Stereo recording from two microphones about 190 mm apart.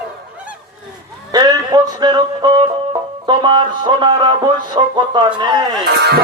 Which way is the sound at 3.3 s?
25° right (ahead or behind).